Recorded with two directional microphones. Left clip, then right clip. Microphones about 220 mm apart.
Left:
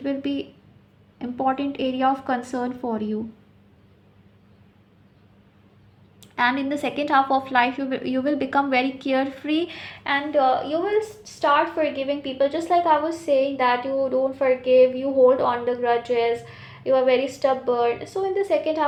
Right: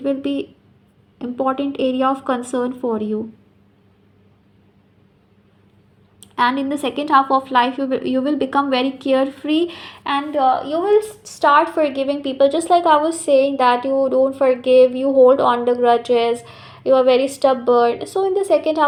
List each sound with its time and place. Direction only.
0.0 s a woman's voice: 10° right (ahead or behind)
6.1 s a woman's voice: 10° right (ahead or behind)
10.7 s a woman's voice: 30° right (ahead or behind)